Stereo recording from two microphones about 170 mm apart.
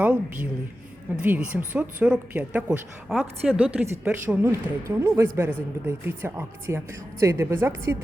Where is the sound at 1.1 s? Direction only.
10° right (ahead or behind).